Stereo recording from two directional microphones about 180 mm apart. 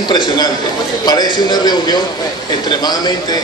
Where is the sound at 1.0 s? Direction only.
25° left (ahead or behind).